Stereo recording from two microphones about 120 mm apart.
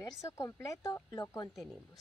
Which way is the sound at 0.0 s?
25° left (ahead or behind).